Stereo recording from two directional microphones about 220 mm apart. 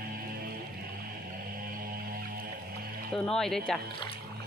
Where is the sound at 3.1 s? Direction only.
Centre (ahead or behind).